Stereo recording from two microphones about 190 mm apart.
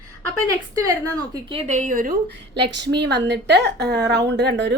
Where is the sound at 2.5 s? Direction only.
65° right (ahead or behind).